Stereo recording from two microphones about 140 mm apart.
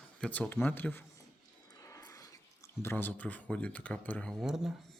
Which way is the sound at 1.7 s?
25° left (ahead or behind).